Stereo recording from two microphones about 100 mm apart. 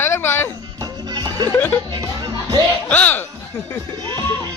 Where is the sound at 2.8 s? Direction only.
15° left (ahead or behind).